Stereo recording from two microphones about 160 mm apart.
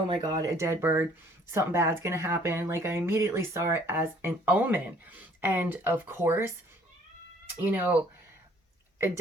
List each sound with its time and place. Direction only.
0.1 s speech: 25° right (ahead or behind)
7.5 s speech: 10° right (ahead or behind)